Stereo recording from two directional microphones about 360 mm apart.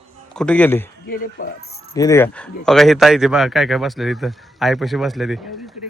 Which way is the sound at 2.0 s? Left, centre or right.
Centre.